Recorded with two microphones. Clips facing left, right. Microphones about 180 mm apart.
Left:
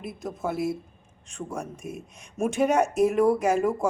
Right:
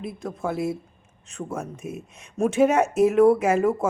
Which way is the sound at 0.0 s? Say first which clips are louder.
Right 2 dB; centre (ahead or behind).